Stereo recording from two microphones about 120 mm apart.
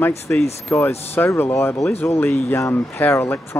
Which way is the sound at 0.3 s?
15° left (ahead or behind).